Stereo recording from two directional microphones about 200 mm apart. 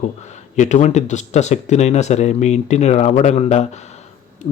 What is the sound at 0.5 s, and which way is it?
Speech, 35° left (ahead or behind).